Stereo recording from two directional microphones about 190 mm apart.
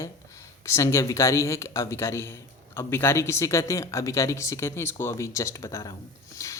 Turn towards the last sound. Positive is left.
turn(degrees=15)  # may be behind; listen again after turning